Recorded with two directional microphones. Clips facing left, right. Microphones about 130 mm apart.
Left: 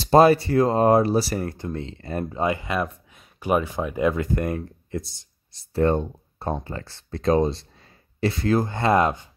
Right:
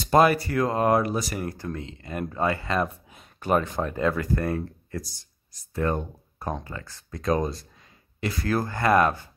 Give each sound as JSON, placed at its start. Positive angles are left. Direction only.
{"t": 0.0, "sound": "speech", "side_deg": 30}
{"t": 2.3, "sound": "speech", "side_deg": 15}